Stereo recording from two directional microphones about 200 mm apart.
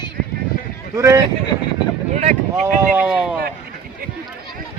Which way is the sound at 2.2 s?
35° right (ahead or behind).